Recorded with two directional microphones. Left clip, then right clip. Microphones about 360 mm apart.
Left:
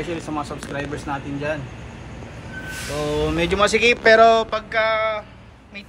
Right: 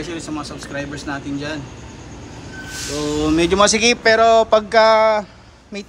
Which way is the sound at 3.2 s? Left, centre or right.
Centre.